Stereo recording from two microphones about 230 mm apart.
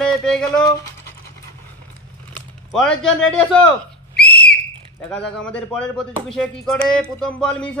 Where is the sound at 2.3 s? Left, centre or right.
Centre.